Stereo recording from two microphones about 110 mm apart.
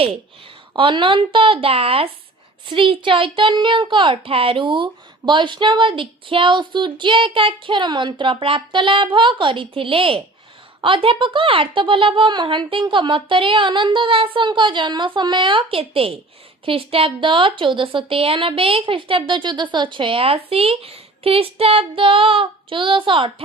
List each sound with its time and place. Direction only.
0.8 s a child's voice: 50° right (ahead or behind)